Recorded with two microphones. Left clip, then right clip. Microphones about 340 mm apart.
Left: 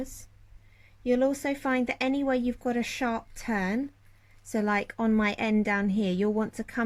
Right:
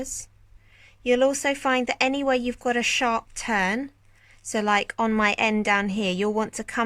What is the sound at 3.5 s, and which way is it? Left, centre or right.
Speech, right.